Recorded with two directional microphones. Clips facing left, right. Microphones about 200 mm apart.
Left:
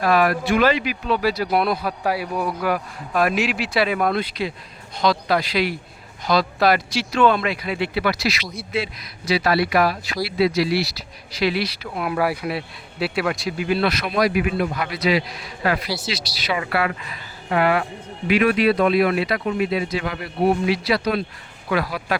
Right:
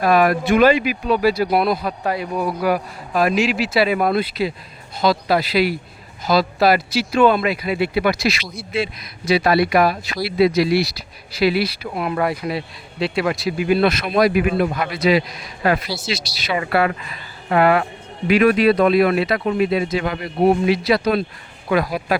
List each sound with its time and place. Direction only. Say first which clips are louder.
0.0 s speech: right 3 dB; 15° right (ahead or behind)
1.6 s speech: right 2 dB; centre (ahead or behind)
2.6 s speech: right 3 dB; 10° right (ahead or behind)
12.0 s speech: right 1 dB; 5° left (ahead or behind)
13.7 s speech: right 4 dB; 20° right (ahead or behind)
14.3 s a man's voice: right 4 dB; 45° right (ahead or behind)
16.0 s speech: right 3 dB; 25° right (ahead or behind)
16.6 s a man's voice: right 6 dB; 40° right (ahead or behind)
19.7 s speech: right 3 dB; 25° right (ahead or behind)